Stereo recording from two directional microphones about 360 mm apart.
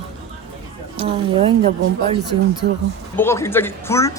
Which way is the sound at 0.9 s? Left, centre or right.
Centre.